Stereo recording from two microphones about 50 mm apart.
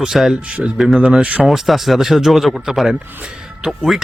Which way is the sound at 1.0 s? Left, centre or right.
Right.